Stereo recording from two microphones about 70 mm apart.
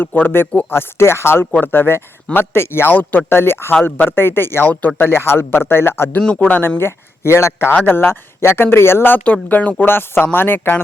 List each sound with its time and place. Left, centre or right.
0.0 s a man's voice: left
9.2 s speech: left